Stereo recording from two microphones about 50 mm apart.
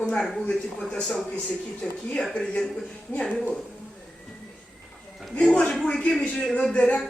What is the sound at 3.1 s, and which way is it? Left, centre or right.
Speech, left.